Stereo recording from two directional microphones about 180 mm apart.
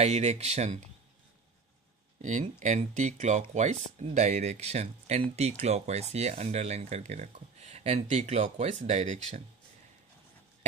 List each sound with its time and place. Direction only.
0.0 s speech: 40° right (ahead or behind)
2.2 s speech: 40° right (ahead or behind)